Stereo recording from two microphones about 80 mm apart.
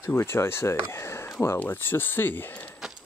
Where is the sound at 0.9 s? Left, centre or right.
Left.